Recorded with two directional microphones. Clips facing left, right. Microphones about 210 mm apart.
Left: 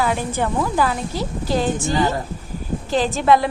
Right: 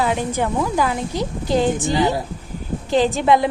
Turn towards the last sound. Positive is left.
turn(degrees=-20)  # may be behind; listen again after turning